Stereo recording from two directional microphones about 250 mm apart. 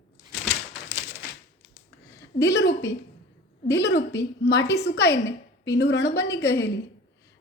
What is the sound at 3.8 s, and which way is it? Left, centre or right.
A woman's voice, left.